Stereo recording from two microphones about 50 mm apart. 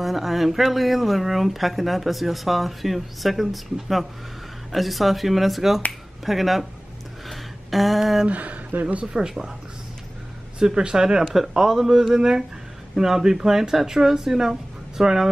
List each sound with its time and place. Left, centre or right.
0.0 s speech: centre
7.2 s a sound: centre
8.3 s a woman's voice: right
9.1 s speech: centre
10.6 s speech: centre